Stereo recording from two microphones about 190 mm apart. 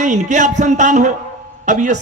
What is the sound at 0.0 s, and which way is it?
A man's voice, 40° right (ahead or behind).